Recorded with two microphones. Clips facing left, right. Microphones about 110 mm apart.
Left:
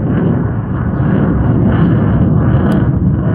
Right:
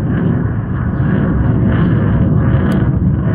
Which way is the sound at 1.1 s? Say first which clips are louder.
Left 2 dB; 45° left (ahead or behind).